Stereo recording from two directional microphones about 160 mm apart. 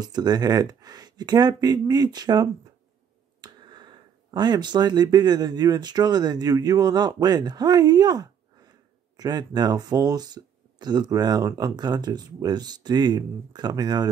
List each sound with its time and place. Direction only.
0.0 s speech: 25° right (ahead or behind)